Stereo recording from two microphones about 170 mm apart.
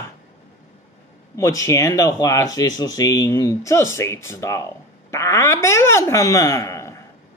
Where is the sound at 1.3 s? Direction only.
20° left (ahead or behind).